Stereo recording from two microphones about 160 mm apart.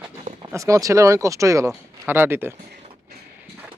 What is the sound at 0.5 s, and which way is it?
Speech, 20° right (ahead or behind).